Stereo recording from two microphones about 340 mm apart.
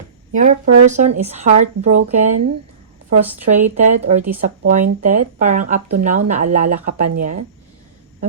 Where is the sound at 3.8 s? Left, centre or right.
Centre.